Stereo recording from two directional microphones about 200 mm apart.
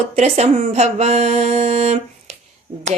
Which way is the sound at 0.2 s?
35° right (ahead or behind).